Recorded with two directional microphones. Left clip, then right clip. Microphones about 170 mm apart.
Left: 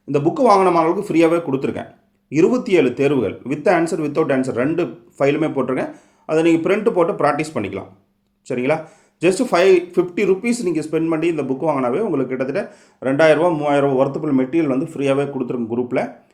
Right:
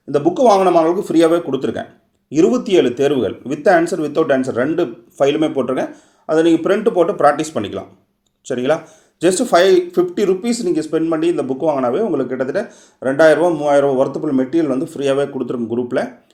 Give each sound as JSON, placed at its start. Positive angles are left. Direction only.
{"t": 0.1, "sound": "speech", "side_deg": -25}
{"t": 9.2, "sound": "speech", "side_deg": -25}